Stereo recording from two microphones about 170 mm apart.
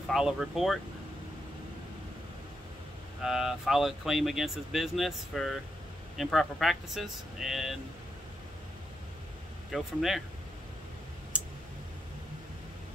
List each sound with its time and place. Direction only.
0.1 s speech: centre (ahead or behind)
3.2 s speech: centre (ahead or behind)
9.7 s speech: centre (ahead or behind)
11.3 s a sound: 5° right (ahead or behind)